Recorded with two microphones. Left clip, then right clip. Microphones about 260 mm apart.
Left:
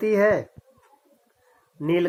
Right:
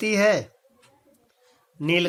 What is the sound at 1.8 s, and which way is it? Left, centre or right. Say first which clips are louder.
Speech: right 1 dB; right.